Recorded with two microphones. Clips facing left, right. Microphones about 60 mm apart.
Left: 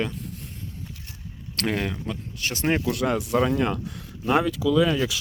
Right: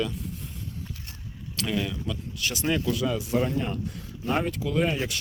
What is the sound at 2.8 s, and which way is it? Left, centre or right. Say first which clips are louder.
Speech: left 3 dB; left.